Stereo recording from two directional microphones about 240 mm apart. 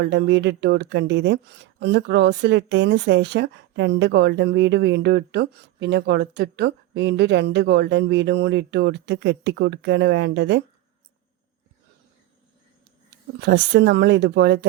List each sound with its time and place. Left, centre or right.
0.0 s speech: right
13.4 s speech: right